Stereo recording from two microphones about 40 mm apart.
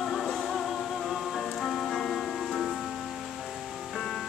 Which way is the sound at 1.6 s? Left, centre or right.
Centre.